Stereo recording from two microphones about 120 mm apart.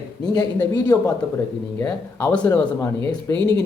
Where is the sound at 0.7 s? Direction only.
35° left (ahead or behind).